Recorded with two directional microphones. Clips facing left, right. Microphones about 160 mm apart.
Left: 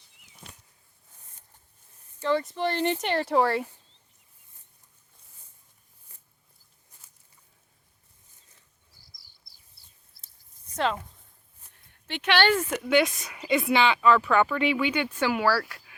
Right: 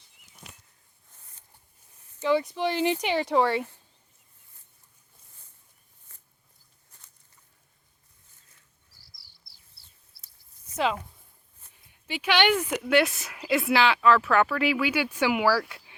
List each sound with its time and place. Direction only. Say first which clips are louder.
2.2 s a woman's voice: right 1 dB; 5° right (ahead or behind)
10.1 s a sound: even; 45° left (ahead or behind)
10.8 s a woman's voice: right 1 dB; 5° right (ahead or behind)